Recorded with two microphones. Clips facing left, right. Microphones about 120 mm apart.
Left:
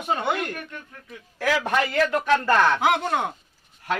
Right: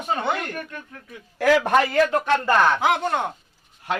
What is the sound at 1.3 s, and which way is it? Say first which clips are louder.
Speech: right 6 dB; 65° right (ahead or behind).